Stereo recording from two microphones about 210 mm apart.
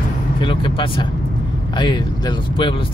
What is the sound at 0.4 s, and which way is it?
Speech, 25° left (ahead or behind).